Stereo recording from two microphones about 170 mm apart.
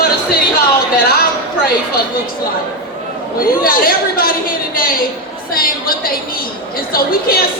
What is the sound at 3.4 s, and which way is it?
A woman's voice, 60° left (ahead or behind).